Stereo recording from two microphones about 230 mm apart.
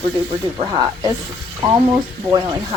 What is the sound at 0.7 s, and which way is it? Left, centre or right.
Speech, centre.